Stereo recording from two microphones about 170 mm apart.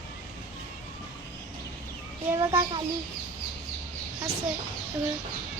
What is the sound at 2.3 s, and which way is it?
Speech, 25° right (ahead or behind).